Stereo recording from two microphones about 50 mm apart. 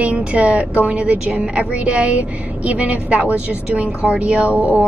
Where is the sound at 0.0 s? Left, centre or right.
Right.